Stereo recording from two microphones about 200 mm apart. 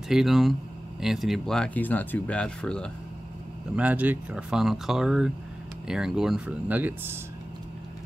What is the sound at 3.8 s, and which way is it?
Speech, 10° right (ahead or behind).